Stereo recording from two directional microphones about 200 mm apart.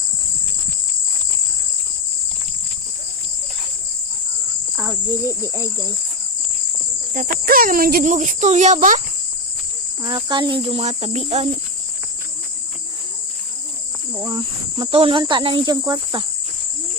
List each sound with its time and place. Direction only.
4.8 s cricket: 15° right (ahead or behind)
7.1 s speech: 45° right (ahead or behind)
10.0 s speech: 20° right (ahead or behind)
14.2 s speech: 20° right (ahead or behind)